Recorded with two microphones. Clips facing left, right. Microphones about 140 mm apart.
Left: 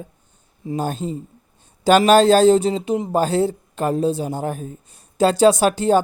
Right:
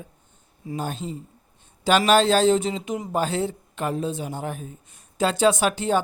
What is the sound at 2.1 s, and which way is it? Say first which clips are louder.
A man's voice: left 5 dB; 40° left (ahead or behind).